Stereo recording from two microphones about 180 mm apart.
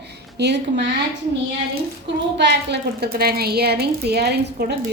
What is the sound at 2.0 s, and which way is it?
A woman's voice, 75° right (ahead or behind).